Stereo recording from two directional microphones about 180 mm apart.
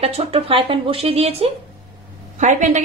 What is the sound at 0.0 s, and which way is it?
A woman's voice, 35° right (ahead or behind).